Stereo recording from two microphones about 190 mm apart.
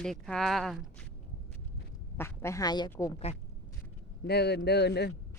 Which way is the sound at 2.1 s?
15° left (ahead or behind).